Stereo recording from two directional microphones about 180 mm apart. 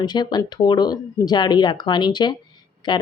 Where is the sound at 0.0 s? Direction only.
25° left (ahead or behind).